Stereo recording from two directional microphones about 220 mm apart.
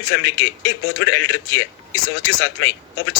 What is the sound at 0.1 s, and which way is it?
Speech, 55° left (ahead or behind).